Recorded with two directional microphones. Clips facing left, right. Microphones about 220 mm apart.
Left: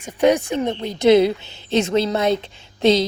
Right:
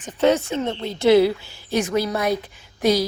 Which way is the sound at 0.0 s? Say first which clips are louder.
Left 2 dB; 15° left (ahead or behind).